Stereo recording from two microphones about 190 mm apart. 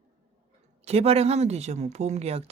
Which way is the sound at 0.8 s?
35° right (ahead or behind).